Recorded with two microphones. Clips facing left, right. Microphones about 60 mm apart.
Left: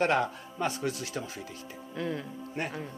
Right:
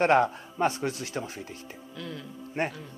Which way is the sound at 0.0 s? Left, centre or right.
Right.